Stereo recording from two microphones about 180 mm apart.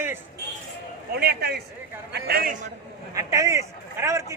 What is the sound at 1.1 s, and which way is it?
Speech, 60° right (ahead or behind).